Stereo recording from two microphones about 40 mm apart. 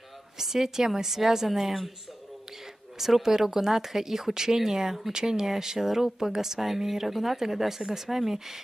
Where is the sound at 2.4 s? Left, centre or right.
Centre.